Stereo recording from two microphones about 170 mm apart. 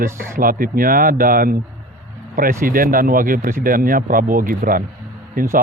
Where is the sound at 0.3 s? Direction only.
55° right (ahead or behind).